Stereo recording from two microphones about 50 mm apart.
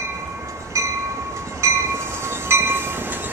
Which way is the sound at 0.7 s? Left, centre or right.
Right.